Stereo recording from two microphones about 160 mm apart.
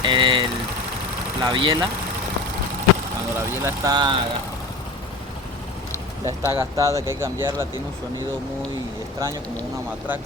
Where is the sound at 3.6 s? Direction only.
20° right (ahead or behind).